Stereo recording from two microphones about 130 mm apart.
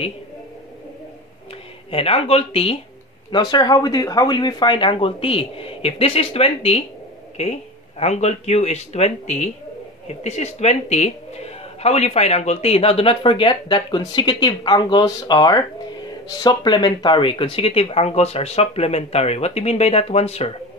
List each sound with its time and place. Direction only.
1.9 s speech: 50° left (ahead or behind)
3.3 s speech: 35° left (ahead or behind); by 20.5 s 55° left (ahead or behind)